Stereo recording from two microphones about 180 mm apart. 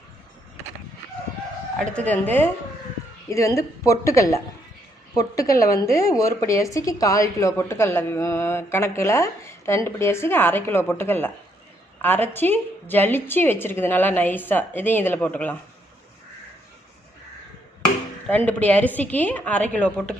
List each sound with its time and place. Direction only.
1.9 s a woman's voice: 10° left (ahead or behind)
18.3 s a woman's voice: 10° left (ahead or behind)